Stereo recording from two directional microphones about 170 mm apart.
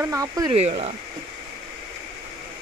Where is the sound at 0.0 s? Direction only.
20° right (ahead or behind).